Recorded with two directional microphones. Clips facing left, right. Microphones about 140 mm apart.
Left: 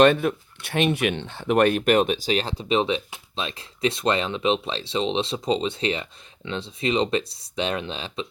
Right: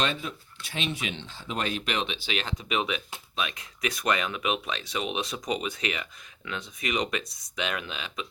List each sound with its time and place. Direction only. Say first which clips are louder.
0.0 s speech: left 13 dB; 60° left (ahead or behind); by 8.3 s 30° left (ahead or behind)